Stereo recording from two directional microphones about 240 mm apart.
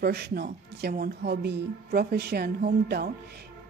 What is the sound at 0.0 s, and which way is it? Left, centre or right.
Speech, right.